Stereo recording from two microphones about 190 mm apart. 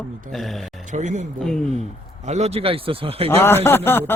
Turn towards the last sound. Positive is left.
turn(degrees=10)  # may be behind; listen again after turning